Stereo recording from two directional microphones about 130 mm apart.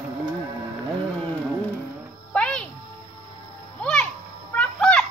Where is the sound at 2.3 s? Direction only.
10° left (ahead or behind).